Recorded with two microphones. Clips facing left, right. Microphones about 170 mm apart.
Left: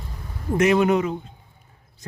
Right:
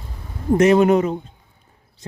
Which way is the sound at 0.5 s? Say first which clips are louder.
Right 5 dB; 35° right (ahead or behind).